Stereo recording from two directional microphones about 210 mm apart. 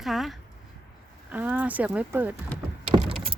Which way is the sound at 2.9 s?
25° right (ahead or behind).